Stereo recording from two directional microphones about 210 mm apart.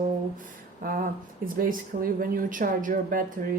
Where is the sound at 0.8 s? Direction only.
40° right (ahead or behind).